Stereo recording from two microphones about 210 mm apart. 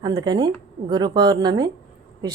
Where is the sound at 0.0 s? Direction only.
20° right (ahead or behind).